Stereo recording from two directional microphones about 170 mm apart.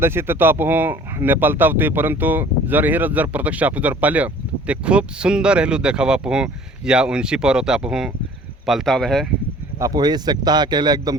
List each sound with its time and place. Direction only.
0.0 s speech: 15° right (ahead or behind); by 9.2 s centre (ahead or behind)
9.7 s speech: 20° right (ahead or behind)